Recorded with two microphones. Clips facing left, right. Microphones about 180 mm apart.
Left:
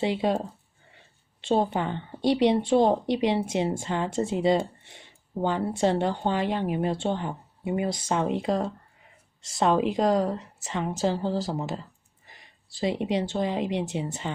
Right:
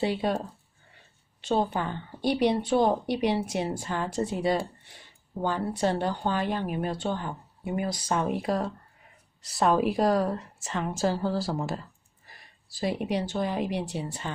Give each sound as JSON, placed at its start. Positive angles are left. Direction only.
{"t": 0.0, "sound": "a woman's voice", "side_deg": 20}
{"t": 1.5, "sound": "a woman's voice", "side_deg": 25}